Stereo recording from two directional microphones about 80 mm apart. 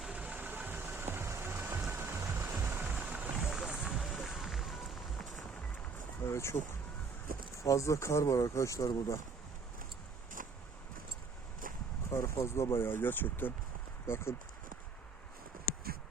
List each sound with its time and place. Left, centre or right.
0.0 s vehicle: centre; by 2.5 s right
2.5 s music: right
3.5 s music: centre
6.2 s speech: left
7.6 s speech: left
12.1 s speech: left